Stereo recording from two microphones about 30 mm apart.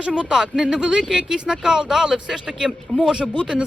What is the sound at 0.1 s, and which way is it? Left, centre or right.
Speech, right.